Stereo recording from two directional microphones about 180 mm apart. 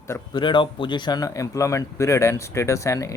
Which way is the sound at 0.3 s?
25° left (ahead or behind).